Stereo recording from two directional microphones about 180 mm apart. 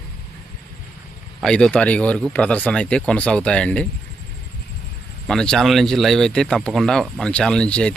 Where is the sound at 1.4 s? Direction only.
5° left (ahead or behind).